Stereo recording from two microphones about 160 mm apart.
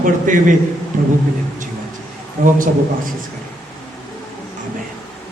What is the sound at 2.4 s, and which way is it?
Speech, 60° right (ahead or behind).